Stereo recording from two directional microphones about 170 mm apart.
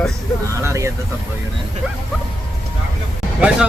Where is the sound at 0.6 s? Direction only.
15° right (ahead or behind).